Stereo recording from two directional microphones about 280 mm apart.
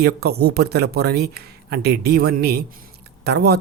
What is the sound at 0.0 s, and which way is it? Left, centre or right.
Speech, right.